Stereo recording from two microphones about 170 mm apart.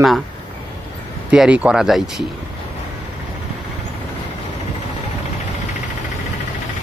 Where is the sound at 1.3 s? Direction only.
5° right (ahead or behind).